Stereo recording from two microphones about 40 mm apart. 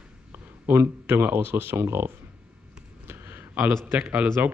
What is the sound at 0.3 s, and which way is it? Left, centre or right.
Speech, right.